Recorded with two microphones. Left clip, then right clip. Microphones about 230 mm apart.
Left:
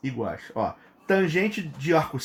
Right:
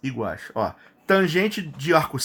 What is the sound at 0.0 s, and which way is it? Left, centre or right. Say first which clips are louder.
Speech: right 2 dB; right.